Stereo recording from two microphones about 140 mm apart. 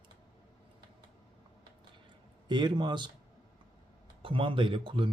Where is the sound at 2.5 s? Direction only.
30° right (ahead or behind).